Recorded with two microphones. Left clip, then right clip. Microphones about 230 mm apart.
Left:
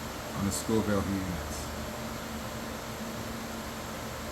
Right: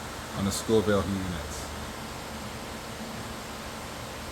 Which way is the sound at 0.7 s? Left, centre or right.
Right.